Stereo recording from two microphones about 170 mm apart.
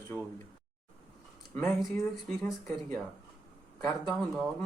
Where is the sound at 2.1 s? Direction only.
Centre (ahead or behind).